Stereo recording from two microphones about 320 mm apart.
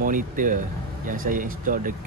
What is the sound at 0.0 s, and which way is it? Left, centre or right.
Speech, right.